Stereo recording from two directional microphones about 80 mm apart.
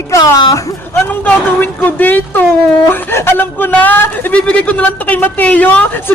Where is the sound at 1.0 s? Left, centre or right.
Left.